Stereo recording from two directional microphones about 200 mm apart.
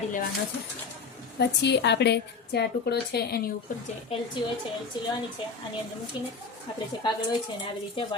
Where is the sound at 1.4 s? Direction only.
60° left (ahead or behind).